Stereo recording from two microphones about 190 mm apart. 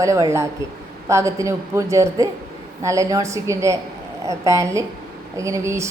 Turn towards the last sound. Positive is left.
turn(degrees=-15)  # may be behind; listen again after turning